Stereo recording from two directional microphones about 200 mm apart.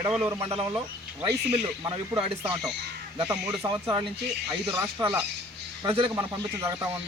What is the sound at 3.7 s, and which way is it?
A man's voice, 25° right (ahead or behind).